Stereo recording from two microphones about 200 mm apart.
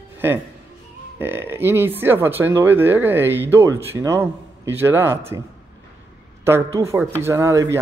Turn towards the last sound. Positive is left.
turn(degrees=-15)  # may be behind; listen again after turning